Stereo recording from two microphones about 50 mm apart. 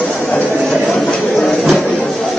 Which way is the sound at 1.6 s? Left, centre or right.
Centre.